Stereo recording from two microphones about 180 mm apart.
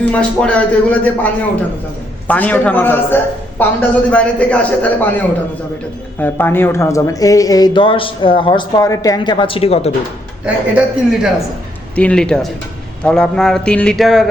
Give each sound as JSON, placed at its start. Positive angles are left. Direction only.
{"t": 0.1, "sound": "a man's voice", "side_deg": 5}
{"t": 10.4, "sound": "speech", "side_deg": -5}
{"t": 11.9, "sound": "speech", "side_deg": 5}